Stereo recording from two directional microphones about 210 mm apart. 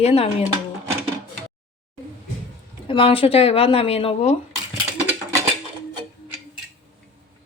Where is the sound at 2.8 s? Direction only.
25° left (ahead or behind).